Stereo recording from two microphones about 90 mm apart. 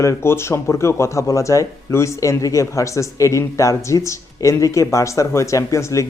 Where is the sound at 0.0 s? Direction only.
30° left (ahead or behind).